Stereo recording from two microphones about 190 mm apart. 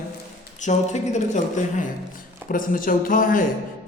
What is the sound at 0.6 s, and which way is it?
A man's voice, 40° left (ahead or behind).